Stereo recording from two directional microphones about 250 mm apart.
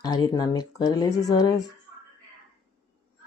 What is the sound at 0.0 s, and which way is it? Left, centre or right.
A woman's voice, centre.